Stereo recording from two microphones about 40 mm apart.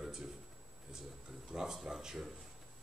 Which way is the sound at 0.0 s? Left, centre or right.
Centre.